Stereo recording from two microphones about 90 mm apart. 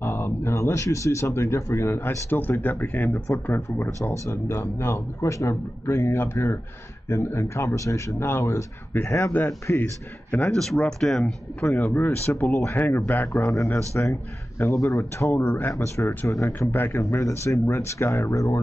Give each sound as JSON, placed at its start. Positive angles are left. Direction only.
{"t": 0.0, "sound": "a man's voice", "side_deg": 25}
{"t": 10.3, "sound": "a man's voice", "side_deg": 10}
{"t": 15.3, "sound": "a man's voice", "side_deg": 20}
{"t": 15.7, "sound": "a man's voice", "side_deg": 35}